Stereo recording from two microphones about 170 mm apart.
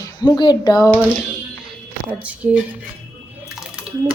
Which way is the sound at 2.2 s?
10° right (ahead or behind).